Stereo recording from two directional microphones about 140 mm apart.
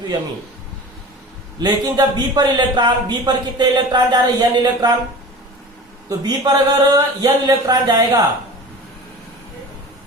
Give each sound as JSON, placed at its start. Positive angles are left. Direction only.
{"t": 1.5, "sound": "a man's voice", "side_deg": -30}
{"t": 6.1, "sound": "a man's voice", "side_deg": -30}